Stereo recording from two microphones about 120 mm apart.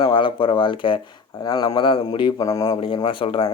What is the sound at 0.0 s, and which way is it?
Speech, 45° left (ahead or behind).